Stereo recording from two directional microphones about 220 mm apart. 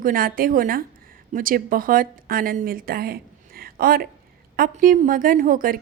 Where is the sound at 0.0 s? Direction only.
40° right (ahead or behind).